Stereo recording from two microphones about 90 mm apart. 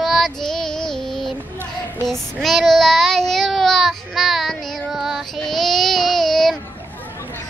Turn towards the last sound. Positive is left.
turn(degrees=5)  # may be behind; listen again after turning